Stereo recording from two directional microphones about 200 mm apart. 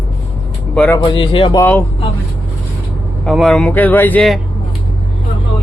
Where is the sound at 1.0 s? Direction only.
25° left (ahead or behind).